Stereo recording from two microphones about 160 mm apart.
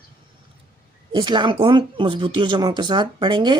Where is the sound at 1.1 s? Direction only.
30° right (ahead or behind).